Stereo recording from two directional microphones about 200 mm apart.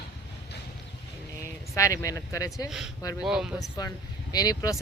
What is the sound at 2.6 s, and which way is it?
Speech, 5° right (ahead or behind).